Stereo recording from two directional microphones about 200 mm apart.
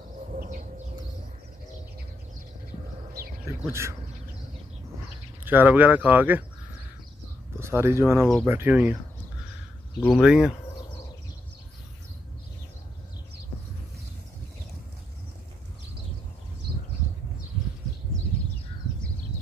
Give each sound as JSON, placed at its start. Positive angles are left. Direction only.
{"t": 0.3, "sound": "a sound", "side_deg": -40}
{"t": 3.1, "sound": "a sound", "side_deg": -45}
{"t": 3.4, "sound": "speech", "side_deg": -15}
{"t": 5.4, "sound": "speech", "side_deg": -10}
{"t": 7.5, "sound": "speech", "side_deg": -10}
{"t": 9.9, "sound": "speech", "side_deg": 0}